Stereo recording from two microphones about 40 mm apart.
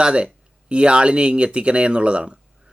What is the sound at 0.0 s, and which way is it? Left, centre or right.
Speech, right.